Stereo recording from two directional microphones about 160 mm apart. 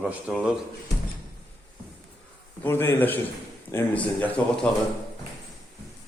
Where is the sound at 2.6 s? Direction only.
15° left (ahead or behind).